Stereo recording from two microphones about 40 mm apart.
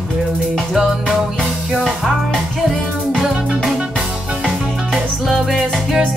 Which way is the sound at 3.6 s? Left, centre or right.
Right.